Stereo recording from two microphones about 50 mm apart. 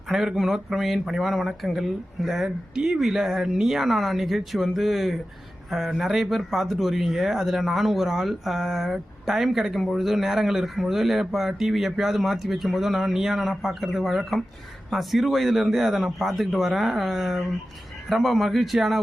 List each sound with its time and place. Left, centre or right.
0.1 s speech: centre